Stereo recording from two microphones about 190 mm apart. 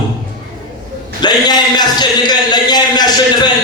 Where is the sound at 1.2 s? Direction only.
20° left (ahead or behind).